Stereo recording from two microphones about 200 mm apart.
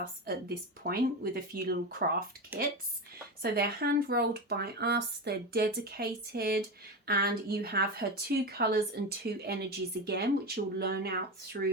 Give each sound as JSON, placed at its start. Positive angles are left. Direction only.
{"t": 0.0, "sound": "speech", "side_deg": -50}
{"t": 3.4, "sound": "speech", "side_deg": -50}